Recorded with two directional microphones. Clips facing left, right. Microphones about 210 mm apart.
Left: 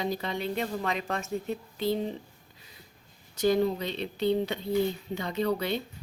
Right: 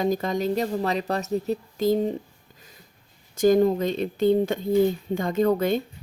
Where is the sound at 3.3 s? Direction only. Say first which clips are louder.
Right 6 dB; 45° right (ahead or behind).